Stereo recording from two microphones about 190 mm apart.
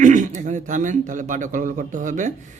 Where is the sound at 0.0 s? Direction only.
40° right (ahead or behind).